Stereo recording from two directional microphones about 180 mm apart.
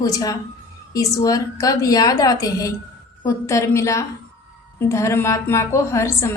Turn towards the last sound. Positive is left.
turn(degrees=15)  # may be behind; listen again after turning